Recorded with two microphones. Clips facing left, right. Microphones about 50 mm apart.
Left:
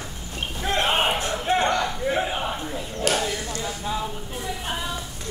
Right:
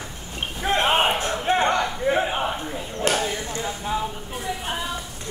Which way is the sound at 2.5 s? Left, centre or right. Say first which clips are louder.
Right 1 dB; centre.